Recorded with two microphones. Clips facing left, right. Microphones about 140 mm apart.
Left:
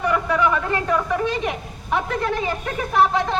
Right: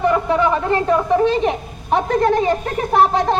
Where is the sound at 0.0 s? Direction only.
30° right (ahead or behind).